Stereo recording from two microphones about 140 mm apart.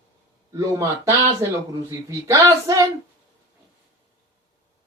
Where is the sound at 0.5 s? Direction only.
20° right (ahead or behind).